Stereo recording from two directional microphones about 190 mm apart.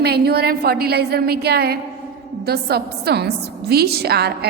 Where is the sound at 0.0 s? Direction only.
55° right (ahead or behind).